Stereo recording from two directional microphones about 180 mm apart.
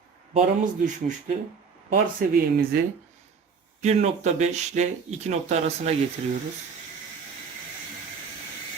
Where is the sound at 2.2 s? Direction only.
55° right (ahead or behind).